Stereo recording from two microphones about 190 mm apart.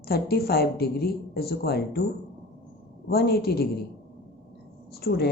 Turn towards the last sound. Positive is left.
turn(degrees=55)  # may be behind; listen again after turning